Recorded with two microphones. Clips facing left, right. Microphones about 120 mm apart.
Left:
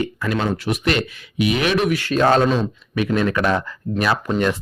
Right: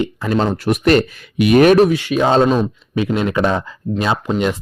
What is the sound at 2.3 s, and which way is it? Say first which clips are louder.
Speech: right 4 dB; 35° right (ahead or behind).